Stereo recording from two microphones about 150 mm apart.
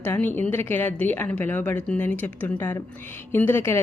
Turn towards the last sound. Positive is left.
turn(degrees=15)  # may be behind; listen again after turning